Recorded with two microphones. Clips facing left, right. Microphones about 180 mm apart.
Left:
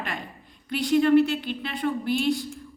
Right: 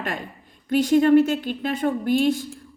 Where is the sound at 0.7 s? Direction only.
45° right (ahead or behind).